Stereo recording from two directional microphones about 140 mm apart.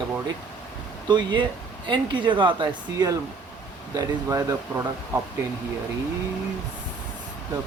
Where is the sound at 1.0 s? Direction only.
30° right (ahead or behind).